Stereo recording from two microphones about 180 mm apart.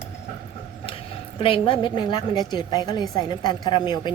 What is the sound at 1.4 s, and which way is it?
A woman's voice, 30° left (ahead or behind).